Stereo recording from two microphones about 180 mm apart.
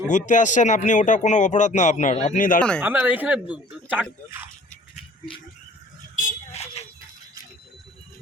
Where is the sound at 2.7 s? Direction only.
10° right (ahead or behind).